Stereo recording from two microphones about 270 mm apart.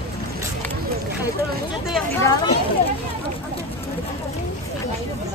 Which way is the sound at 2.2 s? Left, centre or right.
Centre.